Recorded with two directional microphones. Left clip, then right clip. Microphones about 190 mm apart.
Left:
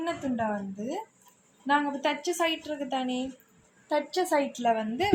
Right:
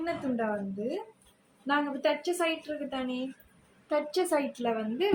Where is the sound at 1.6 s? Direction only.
35° left (ahead or behind).